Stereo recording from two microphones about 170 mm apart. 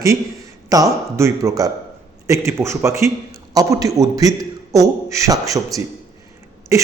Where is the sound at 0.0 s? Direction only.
20° right (ahead or behind).